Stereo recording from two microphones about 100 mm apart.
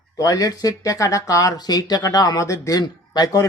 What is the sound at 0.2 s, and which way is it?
Speech, 40° left (ahead or behind).